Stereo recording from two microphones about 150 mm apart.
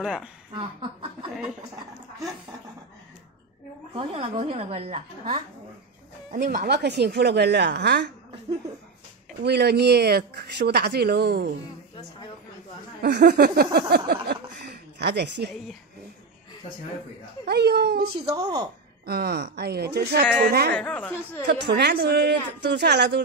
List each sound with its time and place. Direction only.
0.0 s a woman's voice: 5° right (ahead or behind)
3.9 s a woman's voice: 40° right (ahead or behind)
6.3 s speech: 70° right (ahead or behind); by 8.0 s 90° right
9.4 s speech: 90° right
13.0 s speech: 90° right
17.5 s speech: 90° right
18.2 s speech: 25° right (ahead or behind)
19.0 s speech: 90° right
20.7 s speech: 10° left (ahead or behind)
21.5 s speech: 90° right